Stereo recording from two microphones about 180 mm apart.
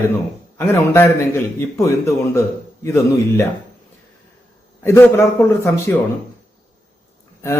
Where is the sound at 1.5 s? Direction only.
15° left (ahead or behind).